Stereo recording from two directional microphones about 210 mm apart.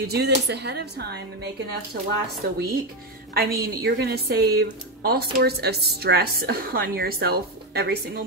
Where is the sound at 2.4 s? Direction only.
45° right (ahead or behind).